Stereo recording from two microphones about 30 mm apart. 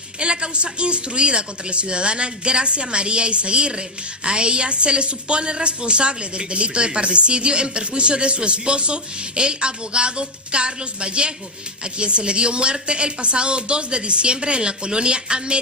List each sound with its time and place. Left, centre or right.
0.2 s a woman's voice: right